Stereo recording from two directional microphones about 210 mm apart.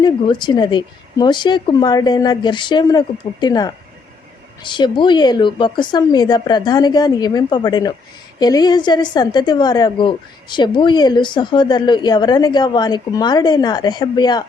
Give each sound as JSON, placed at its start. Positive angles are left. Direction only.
{"t": 0.0, "sound": "a woman's voice", "side_deg": 20}